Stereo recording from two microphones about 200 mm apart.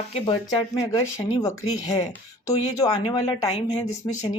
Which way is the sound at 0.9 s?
15° left (ahead or behind).